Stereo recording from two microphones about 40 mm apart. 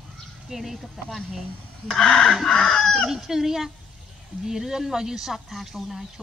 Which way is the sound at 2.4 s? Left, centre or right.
Centre.